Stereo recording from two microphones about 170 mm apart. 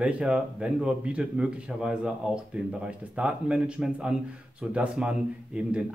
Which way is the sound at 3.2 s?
5° right (ahead or behind).